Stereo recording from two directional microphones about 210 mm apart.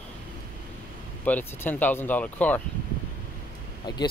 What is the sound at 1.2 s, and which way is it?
Speech, 10° left (ahead or behind).